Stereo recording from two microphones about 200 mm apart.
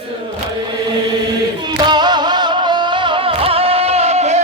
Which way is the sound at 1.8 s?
20° right (ahead or behind).